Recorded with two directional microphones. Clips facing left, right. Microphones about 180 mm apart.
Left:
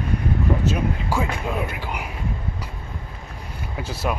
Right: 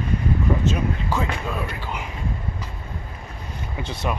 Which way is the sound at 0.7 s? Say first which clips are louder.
Even; 10° left (ahead or behind).